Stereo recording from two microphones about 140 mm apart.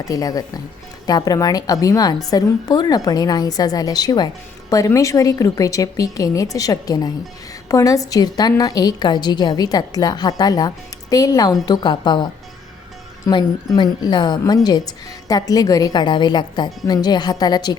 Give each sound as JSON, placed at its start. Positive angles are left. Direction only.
{"t": 0.0, "sound": "a woman's voice", "side_deg": 25}